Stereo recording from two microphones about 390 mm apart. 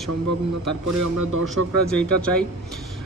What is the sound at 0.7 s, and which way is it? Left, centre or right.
Speech, right.